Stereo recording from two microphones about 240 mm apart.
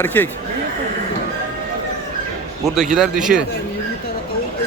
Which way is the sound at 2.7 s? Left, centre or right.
Centre.